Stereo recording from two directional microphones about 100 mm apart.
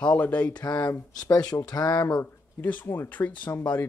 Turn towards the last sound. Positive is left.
turn(degrees=20)  # may be behind; listen again after turning